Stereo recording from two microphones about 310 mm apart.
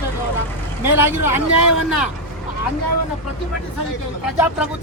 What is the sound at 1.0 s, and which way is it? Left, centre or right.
Speech, centre.